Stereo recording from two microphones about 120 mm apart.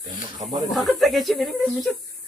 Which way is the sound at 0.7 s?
Centre (ahead or behind).